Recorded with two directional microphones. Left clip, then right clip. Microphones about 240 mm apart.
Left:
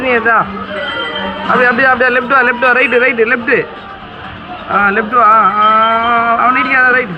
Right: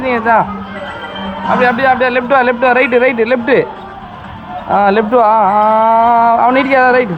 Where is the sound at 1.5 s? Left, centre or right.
Centre.